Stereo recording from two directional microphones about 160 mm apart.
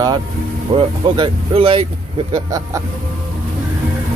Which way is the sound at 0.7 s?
30° right (ahead or behind).